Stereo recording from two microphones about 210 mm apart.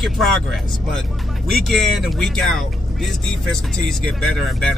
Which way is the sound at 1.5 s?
Centre (ahead or behind).